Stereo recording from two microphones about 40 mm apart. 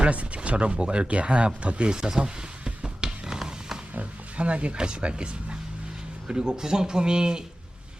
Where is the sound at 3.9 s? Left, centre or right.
Right.